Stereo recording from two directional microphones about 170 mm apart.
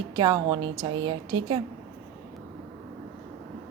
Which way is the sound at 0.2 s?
25° right (ahead or behind).